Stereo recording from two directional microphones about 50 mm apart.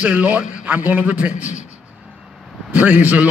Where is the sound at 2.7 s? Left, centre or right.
Right.